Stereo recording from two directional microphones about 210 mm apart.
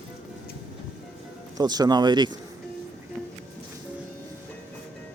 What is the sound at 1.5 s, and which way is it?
Speech, 20° right (ahead or behind).